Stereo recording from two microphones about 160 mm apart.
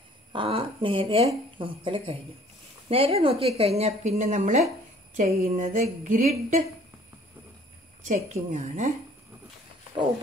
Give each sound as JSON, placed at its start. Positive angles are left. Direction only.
{"t": 0.3, "sound": "speech", "side_deg": -35}
{"t": 5.1, "sound": "a sound", "side_deg": -60}
{"t": 8.1, "sound": "a woman's voice", "side_deg": -45}